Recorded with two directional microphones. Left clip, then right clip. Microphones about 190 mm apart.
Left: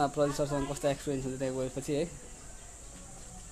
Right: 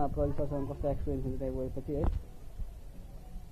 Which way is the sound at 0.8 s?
15° left (ahead or behind).